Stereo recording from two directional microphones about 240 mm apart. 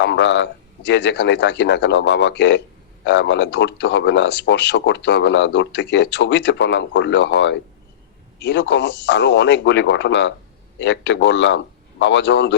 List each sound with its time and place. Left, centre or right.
0.0 s speech: left